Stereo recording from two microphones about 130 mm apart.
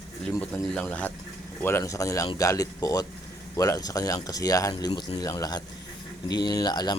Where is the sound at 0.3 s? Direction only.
10° left (ahead or behind).